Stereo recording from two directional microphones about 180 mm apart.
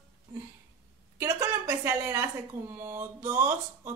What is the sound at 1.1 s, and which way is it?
A woman's voice, 15° right (ahead or behind).